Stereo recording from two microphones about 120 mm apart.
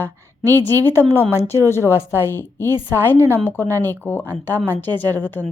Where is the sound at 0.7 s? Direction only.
25° right (ahead or behind).